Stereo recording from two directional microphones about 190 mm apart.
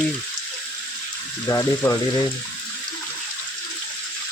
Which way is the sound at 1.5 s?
15° left (ahead or behind).